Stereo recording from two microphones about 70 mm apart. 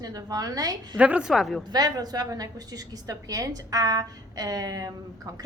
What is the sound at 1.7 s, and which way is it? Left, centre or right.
A woman's voice, right.